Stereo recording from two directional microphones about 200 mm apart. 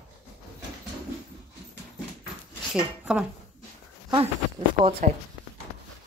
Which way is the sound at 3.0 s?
5° right (ahead or behind).